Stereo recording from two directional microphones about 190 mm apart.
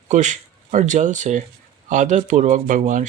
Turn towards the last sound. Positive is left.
turn(degrees=-40)  # may be behind; listen again after turning